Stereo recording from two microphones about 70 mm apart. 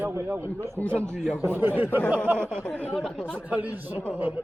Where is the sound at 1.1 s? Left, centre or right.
Centre.